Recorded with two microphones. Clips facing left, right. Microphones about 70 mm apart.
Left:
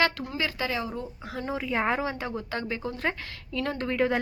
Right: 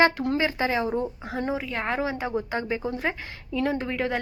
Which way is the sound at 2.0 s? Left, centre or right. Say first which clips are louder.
Right 4 dB; centre.